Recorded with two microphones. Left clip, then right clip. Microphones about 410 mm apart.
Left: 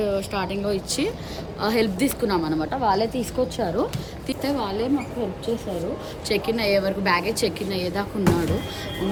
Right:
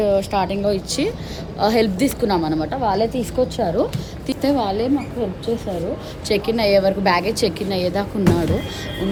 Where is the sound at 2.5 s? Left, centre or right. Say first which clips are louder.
Right 2 dB; right.